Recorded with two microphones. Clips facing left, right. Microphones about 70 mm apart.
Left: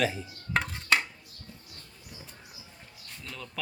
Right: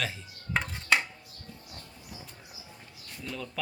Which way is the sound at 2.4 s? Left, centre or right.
Centre.